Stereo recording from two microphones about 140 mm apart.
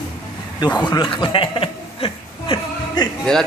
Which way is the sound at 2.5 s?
30° left (ahead or behind).